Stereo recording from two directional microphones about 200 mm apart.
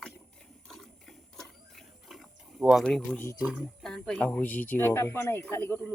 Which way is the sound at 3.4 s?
Centre (ahead or behind).